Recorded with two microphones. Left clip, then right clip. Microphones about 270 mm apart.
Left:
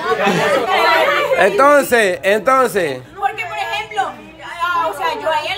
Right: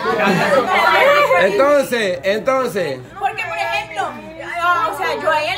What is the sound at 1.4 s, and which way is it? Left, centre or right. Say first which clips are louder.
Speech: left 2 dB; centre.